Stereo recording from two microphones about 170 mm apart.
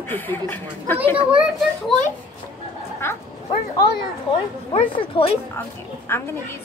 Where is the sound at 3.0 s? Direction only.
15° left (ahead or behind).